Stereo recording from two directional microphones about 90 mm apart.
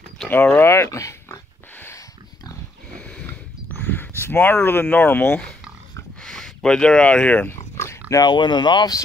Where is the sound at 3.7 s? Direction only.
20° left (ahead or behind).